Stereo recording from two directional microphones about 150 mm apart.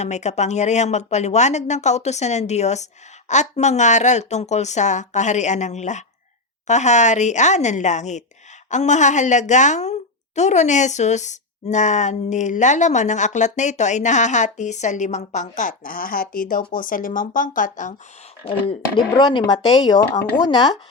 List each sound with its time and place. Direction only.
0.0 s speech: 50° left (ahead or behind)
18.4 s speech: 40° left (ahead or behind)